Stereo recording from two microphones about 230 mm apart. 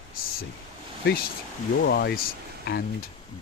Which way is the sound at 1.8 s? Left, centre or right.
Left.